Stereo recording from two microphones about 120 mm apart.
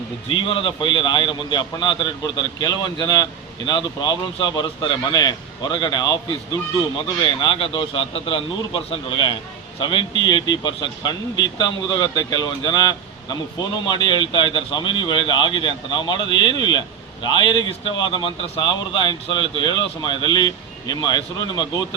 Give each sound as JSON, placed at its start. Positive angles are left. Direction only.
{"t": 0.3, "sound": "a man's voice", "side_deg": 45}
{"t": 7.3, "sound": "a man's voice", "side_deg": 45}